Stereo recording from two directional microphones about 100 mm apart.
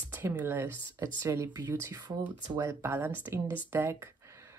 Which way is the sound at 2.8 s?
20° right (ahead or behind).